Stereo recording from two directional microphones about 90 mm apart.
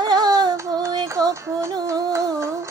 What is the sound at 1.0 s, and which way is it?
Music, 35° right (ahead or behind).